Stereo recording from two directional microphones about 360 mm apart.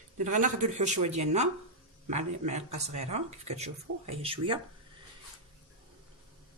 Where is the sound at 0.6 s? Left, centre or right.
Right.